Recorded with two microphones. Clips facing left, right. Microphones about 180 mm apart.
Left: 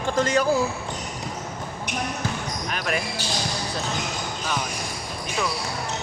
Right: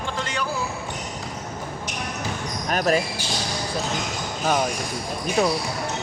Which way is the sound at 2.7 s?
40° right (ahead or behind).